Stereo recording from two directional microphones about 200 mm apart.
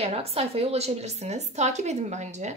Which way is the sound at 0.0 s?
30° right (ahead or behind).